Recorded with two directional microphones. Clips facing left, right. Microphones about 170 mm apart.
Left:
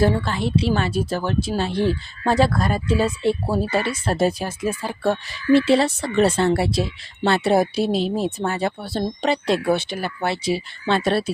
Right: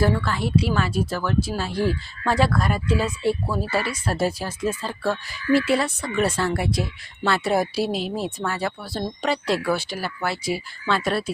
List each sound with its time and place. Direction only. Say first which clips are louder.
0.0 s speech: left 2 dB; 20° left (ahead or behind)